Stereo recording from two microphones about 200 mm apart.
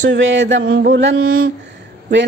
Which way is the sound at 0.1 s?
65° right (ahead or behind).